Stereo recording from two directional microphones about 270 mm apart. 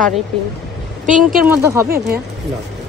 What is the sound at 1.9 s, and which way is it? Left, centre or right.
Speech, right.